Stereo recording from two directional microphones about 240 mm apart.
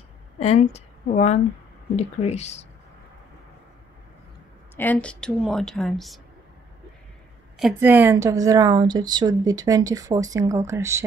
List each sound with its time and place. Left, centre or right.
0.4 s a woman's voice: left
4.7 s a woman's voice: centre
7.5 s a woman's voice: centre